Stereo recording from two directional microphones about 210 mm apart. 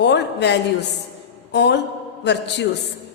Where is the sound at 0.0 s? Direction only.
55° left (ahead or behind).